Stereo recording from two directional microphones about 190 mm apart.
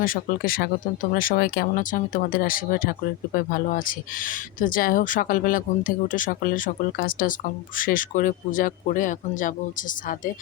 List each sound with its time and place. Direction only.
0.0 s speech: 50° left (ahead or behind)